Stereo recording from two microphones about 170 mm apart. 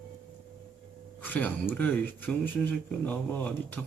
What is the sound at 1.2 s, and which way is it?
Speech, 10° left (ahead or behind).